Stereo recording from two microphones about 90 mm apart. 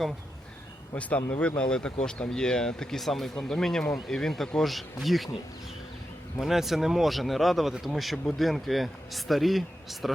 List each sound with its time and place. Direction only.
0.9 s speech: 15° left (ahead or behind)
6.4 s speech: centre (ahead or behind)